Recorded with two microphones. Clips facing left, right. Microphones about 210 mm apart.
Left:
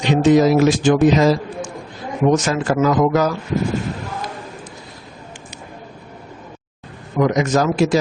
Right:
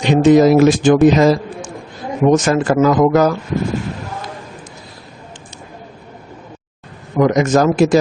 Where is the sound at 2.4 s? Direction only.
50° right (ahead or behind).